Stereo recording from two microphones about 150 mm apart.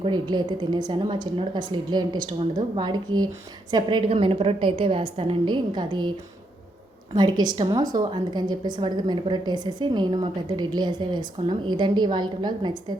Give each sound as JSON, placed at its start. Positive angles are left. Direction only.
{"t": 0.0, "sound": "a woman's voice", "side_deg": -30}
{"t": 7.1, "sound": "a woman's voice", "side_deg": -30}